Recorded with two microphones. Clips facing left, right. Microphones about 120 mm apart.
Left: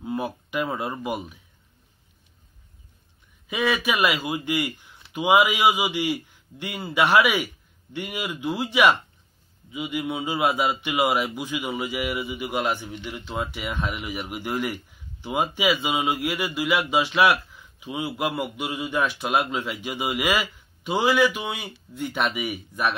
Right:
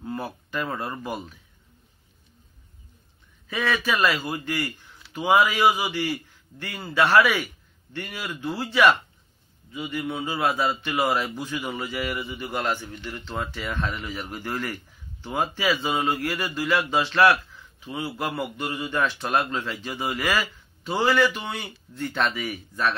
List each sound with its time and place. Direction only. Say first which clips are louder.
0.0 s speech: left 3 dB; 15° left (ahead or behind)
3.4 s speech: left 2 dB; 15° left (ahead or behind)